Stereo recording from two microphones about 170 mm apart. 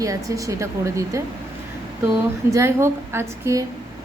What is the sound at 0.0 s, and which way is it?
Speech, 20° right (ahead or behind).